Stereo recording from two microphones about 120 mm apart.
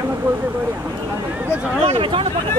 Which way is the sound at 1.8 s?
55° right (ahead or behind).